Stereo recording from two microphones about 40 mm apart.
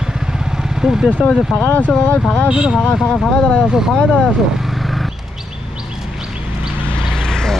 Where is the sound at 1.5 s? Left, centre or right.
Centre.